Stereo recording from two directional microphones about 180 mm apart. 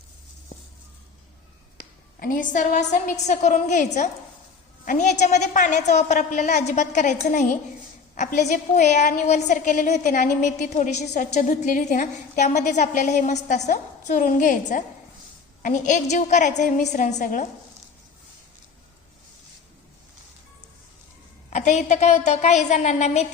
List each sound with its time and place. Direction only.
2.1 s a woman's voice: 50° left (ahead or behind)
4.9 s a woman's voice: 45° left (ahead or behind)
21.5 s a woman's voice: 40° left (ahead or behind)